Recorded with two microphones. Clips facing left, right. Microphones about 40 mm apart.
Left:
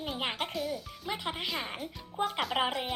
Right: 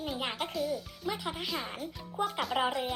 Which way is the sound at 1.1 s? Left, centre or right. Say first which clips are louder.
Left 2 dB; left.